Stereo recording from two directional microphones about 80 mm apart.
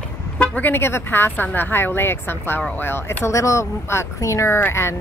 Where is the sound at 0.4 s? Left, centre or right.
Left.